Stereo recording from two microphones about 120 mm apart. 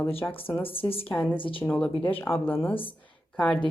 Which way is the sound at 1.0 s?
15° left (ahead or behind).